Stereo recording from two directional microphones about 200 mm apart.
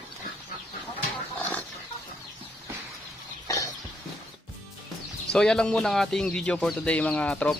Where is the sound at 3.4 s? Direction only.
15° left (ahead or behind).